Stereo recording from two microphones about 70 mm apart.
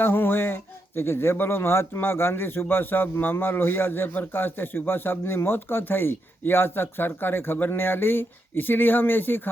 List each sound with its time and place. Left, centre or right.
0.0 s speech: left